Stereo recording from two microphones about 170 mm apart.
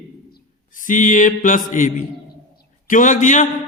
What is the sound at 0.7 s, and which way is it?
A man's voice, 50° left (ahead or behind).